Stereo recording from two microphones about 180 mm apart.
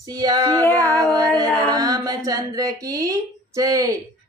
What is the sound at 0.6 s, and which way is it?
Speech, 10° left (ahead or behind).